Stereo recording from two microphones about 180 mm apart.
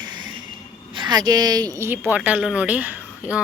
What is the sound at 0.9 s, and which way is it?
Speech, 25° right (ahead or behind).